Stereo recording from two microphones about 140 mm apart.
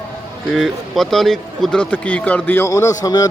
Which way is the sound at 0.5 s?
Centre (ahead or behind).